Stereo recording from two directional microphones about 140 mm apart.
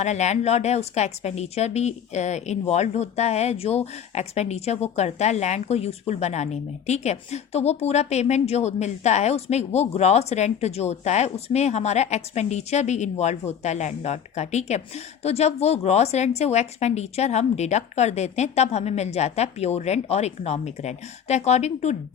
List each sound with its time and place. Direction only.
0.0 s a woman's voice: 55° left (ahead or behind)